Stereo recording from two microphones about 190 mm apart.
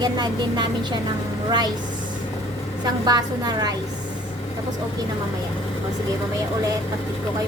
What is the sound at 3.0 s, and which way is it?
Speech, 20° right (ahead or behind).